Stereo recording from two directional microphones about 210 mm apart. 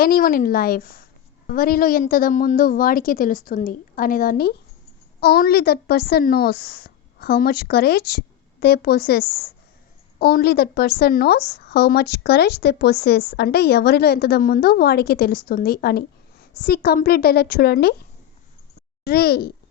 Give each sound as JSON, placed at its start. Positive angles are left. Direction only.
{"t": 0.0, "sound": "a woman's voice", "side_deg": 45}
{"t": 19.0, "sound": "a woman's voice", "side_deg": 45}